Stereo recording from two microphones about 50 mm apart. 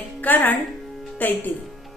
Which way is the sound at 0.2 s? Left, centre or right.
Left.